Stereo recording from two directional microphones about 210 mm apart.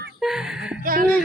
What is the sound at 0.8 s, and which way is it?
Speech, 45° right (ahead or behind).